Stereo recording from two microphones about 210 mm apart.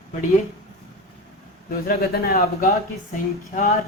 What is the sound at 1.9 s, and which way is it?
Speech, 45° left (ahead or behind).